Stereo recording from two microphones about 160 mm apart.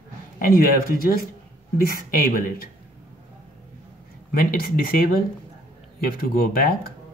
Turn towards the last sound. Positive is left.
turn(degrees=65)  # may be behind; listen again after turning